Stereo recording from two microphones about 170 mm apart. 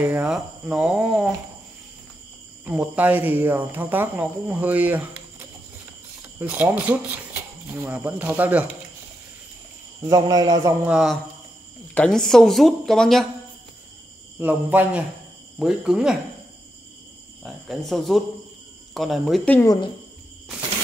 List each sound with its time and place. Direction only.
0.0 s speech: 5° right (ahead or behind)
2.6 s speech: 10° right (ahead or behind)
6.4 s speech: 10° right (ahead or behind)
10.0 s speech: 20° right (ahead or behind)
10.9 s speech: 5° right (ahead or behind)
14.4 s speech: 10° right (ahead or behind)
17.4 s speech: centre (ahead or behind)